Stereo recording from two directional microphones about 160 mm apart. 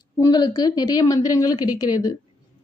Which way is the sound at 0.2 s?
25° left (ahead or behind).